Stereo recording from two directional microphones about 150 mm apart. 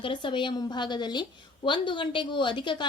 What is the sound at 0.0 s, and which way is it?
A woman's voice, 30° left (ahead or behind).